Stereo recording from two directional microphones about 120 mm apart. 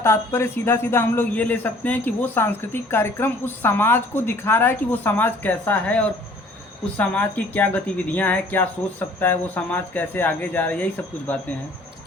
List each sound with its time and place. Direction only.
0.0 s a man's voice: 20° left (ahead or behind)